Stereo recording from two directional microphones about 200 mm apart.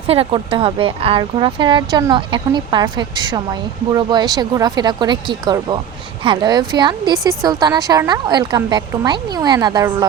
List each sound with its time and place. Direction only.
0.1 s a woman's voice: 30° right (ahead or behind)